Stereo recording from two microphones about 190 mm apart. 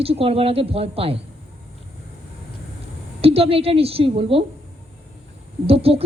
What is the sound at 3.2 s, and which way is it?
A woman's voice, 30° right (ahead or behind).